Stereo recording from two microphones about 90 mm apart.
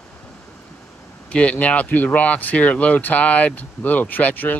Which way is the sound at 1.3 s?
10° left (ahead or behind).